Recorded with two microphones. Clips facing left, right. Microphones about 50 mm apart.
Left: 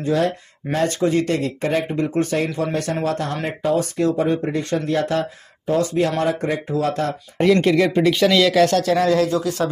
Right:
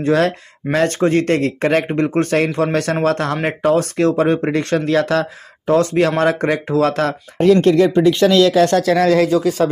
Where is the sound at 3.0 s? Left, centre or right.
Right.